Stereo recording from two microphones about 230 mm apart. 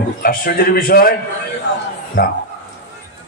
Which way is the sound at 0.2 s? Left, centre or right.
Left.